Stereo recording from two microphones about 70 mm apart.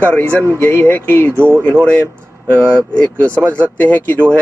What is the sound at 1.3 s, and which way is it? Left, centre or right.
Speech, right.